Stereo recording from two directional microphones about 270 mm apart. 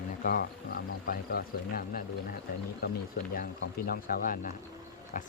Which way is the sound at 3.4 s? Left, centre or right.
Left.